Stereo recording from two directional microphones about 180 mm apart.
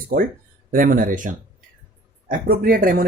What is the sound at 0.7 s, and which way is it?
Speech, 50° right (ahead or behind).